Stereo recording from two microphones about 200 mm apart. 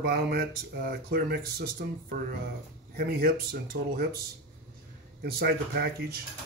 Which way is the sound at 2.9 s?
50° right (ahead or behind).